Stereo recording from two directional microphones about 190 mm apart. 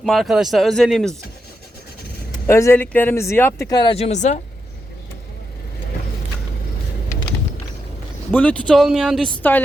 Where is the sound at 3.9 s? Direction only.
35° left (ahead or behind).